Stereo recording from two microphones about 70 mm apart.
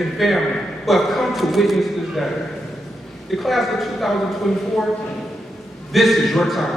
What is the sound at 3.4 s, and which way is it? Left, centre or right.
A man's voice, centre.